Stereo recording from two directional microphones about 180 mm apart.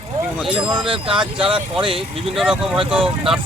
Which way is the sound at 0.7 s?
30° right (ahead or behind).